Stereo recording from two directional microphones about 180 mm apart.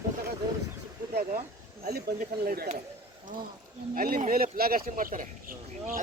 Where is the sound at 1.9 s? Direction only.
60° right (ahead or behind).